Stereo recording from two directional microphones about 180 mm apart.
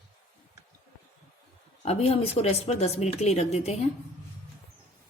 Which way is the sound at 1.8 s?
35° left (ahead or behind).